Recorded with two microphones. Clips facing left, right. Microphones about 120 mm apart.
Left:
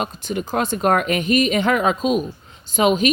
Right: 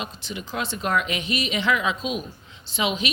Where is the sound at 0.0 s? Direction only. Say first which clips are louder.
Left 9 dB; 50° left (ahead or behind).